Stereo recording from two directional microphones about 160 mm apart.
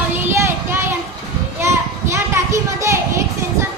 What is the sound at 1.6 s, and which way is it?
Children playing, 15° right (ahead or behind).